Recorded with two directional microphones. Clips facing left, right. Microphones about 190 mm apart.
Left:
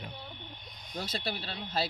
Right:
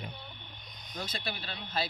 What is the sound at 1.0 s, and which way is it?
Speech, 35° left (ahead or behind).